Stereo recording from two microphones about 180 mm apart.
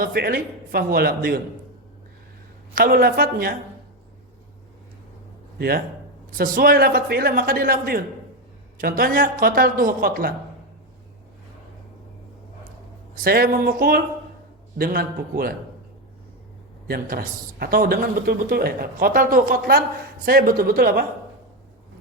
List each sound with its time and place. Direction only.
0.0 s speech: 55° right (ahead or behind)
2.7 s a man's voice: 55° right (ahead or behind)
5.5 s a man's voice: 60° right (ahead or behind)
13.1 s speech: 55° right (ahead or behind)
16.9 s speech: 55° right (ahead or behind)